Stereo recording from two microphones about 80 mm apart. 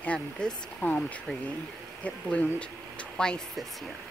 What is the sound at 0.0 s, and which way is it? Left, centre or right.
Speech, centre.